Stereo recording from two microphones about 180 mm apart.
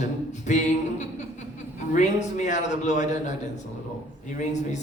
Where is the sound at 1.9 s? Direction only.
45° left (ahead or behind).